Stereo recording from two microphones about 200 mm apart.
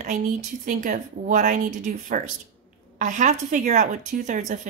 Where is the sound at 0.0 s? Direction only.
40° right (ahead or behind).